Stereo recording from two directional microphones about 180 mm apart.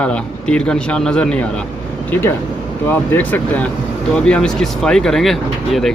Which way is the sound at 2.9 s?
10° left (ahead or behind).